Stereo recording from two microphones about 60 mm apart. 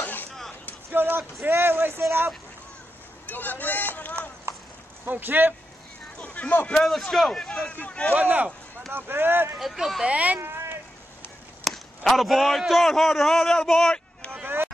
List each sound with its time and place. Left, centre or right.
0.0 s a sound: left
0.8 s speech: right
3.3 s speech: left
4.5 s clip-clop: right
5.0 s speech: right
6.1 s a sound: centre
6.7 s a man's voice: centre
8.1 s a man's voice: right
9.6 s a man's voice: centre
10.0 s a man's voice: right
10.4 s a sound: right
11.6 s a man's voice: centre
14.4 s a sound: right